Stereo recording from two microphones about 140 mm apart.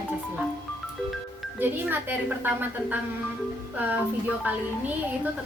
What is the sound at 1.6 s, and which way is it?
A woman's voice, 15° right (ahead or behind).